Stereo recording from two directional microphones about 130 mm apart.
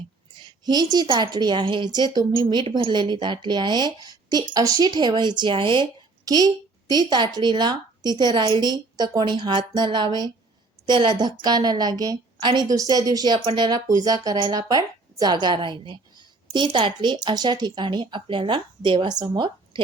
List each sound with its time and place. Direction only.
0.3 s speech: 35° right (ahead or behind)
6.2 s a woman's voice: 30° right (ahead or behind)